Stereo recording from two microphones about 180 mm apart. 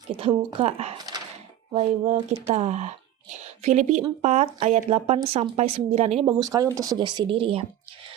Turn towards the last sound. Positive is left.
turn(degrees=-30)  # may be behind; listen again after turning